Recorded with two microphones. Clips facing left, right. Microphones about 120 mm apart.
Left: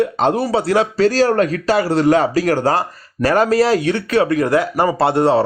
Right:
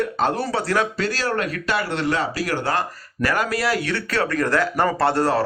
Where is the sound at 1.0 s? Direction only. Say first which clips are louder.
Left 10 dB; 40° left (ahead or behind).